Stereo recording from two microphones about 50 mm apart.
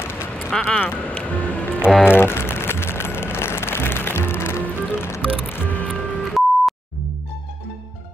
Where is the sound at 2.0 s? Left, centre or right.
Left.